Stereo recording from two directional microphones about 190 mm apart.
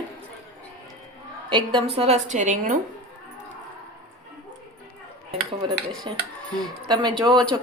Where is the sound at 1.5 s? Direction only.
25° right (ahead or behind).